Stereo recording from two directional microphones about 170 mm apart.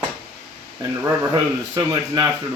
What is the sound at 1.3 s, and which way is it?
Speech, 20° right (ahead or behind).